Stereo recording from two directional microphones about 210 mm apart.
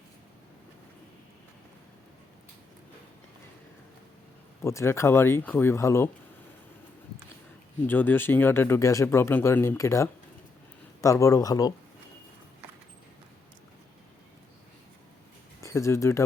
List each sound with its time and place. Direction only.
4.6 s speech: 10° left (ahead or behind)
7.9 s speech: 10° left (ahead or behind)
15.6 s speech: 15° left (ahead or behind)